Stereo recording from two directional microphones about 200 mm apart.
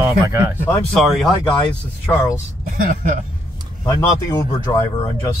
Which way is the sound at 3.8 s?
15° left (ahead or behind).